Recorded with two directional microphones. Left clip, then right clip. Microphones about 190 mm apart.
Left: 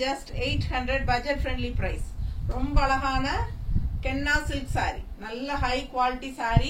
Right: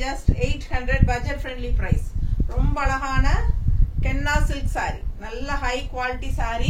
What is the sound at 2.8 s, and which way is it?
A woman's voice, 15° right (ahead or behind).